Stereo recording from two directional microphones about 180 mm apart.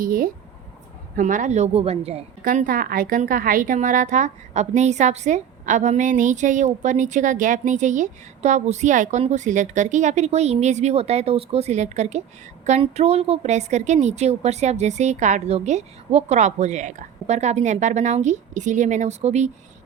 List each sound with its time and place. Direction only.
0.0 s a woman's voice: 50° right (ahead or behind); by 2.2 s 35° right (ahead or behind)
2.4 s a woman's voice: 50° right (ahead or behind)